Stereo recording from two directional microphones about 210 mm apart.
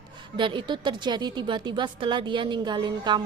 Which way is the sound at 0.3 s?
20° right (ahead or behind).